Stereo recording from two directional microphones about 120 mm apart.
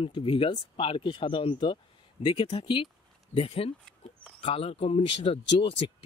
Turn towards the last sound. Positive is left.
turn(degrees=55)  # may be behind; listen again after turning